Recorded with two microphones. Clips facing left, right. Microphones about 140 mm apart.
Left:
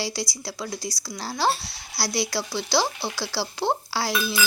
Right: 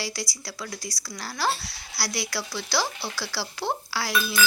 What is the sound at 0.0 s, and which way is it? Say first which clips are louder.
Speech: left 4 dB; 25° left (ahead or behind).